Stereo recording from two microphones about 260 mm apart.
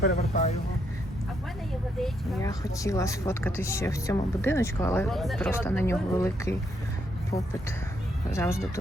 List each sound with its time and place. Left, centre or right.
0.2 s speech: left
2.0 s speech: centre
2.5 s speech: centre
8.3 s speech: centre